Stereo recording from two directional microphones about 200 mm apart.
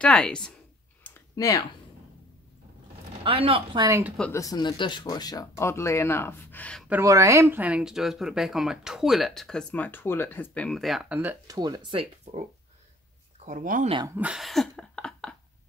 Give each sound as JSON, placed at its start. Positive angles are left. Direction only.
{"t": 0.0, "sound": "speech", "side_deg": 5}
{"t": 1.3, "sound": "speech", "side_deg": 15}
{"t": 3.3, "sound": "speech", "side_deg": -30}
{"t": 4.2, "sound": "speech", "side_deg": 15}
{"t": 6.9, "sound": "speech", "side_deg": -15}
{"t": 12.3, "sound": "speech", "side_deg": -35}
{"t": 13.5, "sound": "speech", "side_deg": -40}
{"t": 13.9, "sound": "speech", "side_deg": -15}
{"t": 14.2, "sound": "a sound", "side_deg": 0}